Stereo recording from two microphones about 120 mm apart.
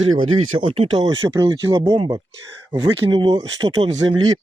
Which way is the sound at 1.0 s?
30° right (ahead or behind).